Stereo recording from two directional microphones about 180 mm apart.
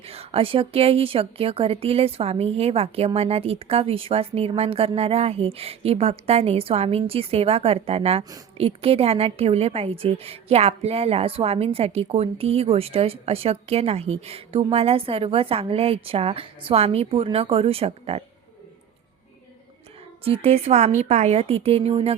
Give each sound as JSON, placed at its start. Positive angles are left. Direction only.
{"t": 0.0, "sound": "a woman's voice", "side_deg": -35}
{"t": 20.2, "sound": "a woman's voice", "side_deg": -35}